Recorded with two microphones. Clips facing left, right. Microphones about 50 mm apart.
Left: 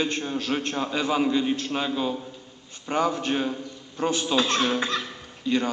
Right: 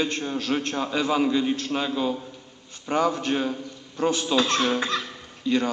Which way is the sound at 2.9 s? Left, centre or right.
Centre.